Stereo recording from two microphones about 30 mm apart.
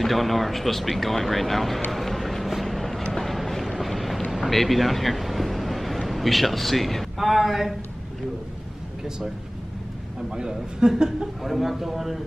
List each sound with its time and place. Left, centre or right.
0.0 s speech: centre
1.9 s vehicle: centre
4.5 s speech: centre
10.3 s a man's voice: right
11.4 s speech: centre